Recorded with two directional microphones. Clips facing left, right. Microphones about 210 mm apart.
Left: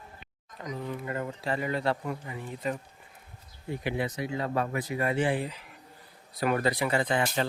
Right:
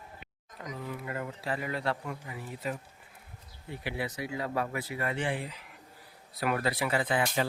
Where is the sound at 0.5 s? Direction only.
5° right (ahead or behind).